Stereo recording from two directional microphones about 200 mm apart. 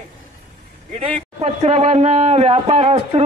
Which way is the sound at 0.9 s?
35° right (ahead or behind).